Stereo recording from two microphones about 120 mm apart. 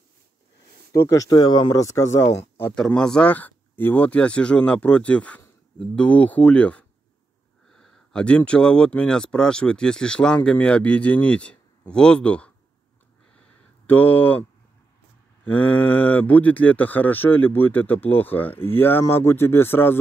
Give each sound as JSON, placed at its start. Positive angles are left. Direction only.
{"t": 1.0, "sound": "speech", "side_deg": 25}
{"t": 2.7, "sound": "speech", "side_deg": 5}
{"t": 13.8, "sound": "speech", "side_deg": 15}
{"t": 15.4, "sound": "speech", "side_deg": 15}